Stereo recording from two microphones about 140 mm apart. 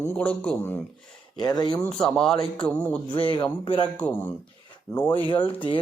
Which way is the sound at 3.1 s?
35° left (ahead or behind).